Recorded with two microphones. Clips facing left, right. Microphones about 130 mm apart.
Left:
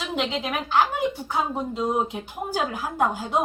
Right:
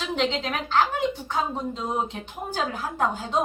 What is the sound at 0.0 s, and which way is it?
A woman's voice, 5° left (ahead or behind).